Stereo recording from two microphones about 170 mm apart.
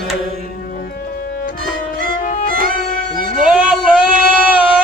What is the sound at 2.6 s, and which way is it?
Music, 55° right (ahead or behind).